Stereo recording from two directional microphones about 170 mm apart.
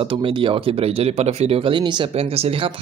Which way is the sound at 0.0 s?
30° right (ahead or behind).